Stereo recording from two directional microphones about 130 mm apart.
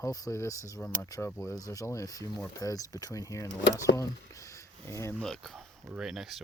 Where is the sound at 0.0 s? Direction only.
25° left (ahead or behind).